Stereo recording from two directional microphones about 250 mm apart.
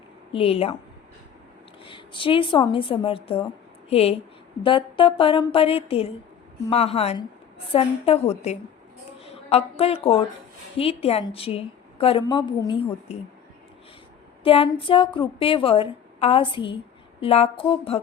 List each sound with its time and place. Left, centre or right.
0.3 s a woman's voice: left
1.8 s a woman's voice: centre
14.4 s a woman's voice: left